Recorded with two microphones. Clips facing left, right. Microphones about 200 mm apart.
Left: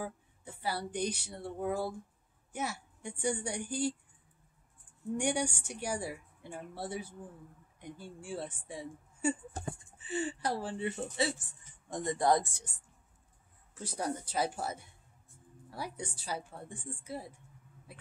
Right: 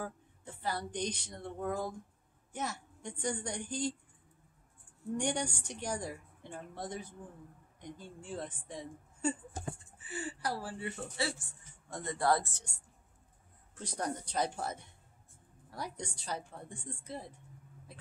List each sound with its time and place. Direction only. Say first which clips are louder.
0.0 s a woman's voice: left 1 dB; 10° left (ahead or behind)
5.1 s a woman's voice: left 2 dB; 10° left (ahead or behind)
10.0 s a woman's voice: left 4 dB; 25° left (ahead or behind)
13.7 s a woman's voice: left 1 dB; 5° left (ahead or behind)